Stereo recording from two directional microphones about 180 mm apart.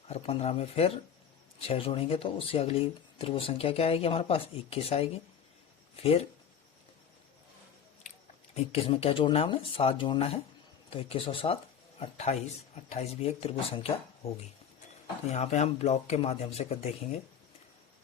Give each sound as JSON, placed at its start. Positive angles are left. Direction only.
{"t": 0.1, "sound": "speech", "side_deg": 35}
{"t": 8.5, "sound": "speech", "side_deg": 35}